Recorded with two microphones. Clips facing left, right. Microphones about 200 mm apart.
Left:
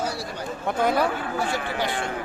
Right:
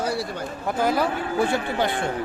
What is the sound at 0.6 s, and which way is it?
Speech, centre (ahead or behind).